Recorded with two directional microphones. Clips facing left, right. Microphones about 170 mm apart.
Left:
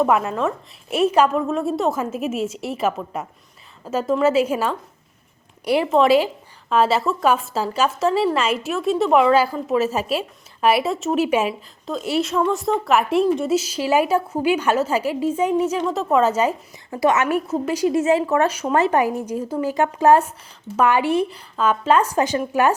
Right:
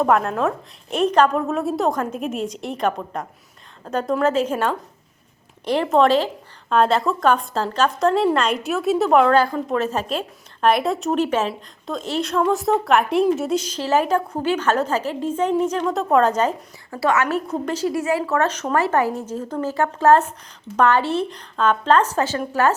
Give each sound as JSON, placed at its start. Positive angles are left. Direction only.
{"t": 0.0, "sound": "a woman's voice", "side_deg": 5}
{"t": 16.9, "sound": "a woman's voice", "side_deg": 20}
{"t": 17.8, "sound": "a woman's voice", "side_deg": 20}